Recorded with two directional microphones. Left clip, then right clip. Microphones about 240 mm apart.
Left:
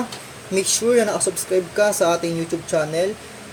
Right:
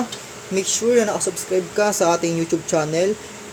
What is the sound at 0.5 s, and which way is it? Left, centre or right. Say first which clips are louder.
Speech: even; centre.